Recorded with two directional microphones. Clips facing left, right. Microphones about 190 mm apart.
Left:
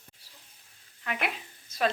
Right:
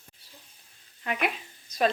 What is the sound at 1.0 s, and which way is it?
Speech, 20° right (ahead or behind).